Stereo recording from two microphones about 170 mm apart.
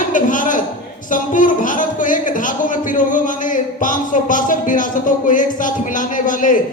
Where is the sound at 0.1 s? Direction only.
50° left (ahead or behind).